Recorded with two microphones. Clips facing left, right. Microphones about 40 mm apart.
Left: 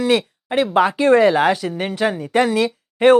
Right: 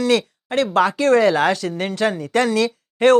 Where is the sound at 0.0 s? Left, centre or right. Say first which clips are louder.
Even; centre.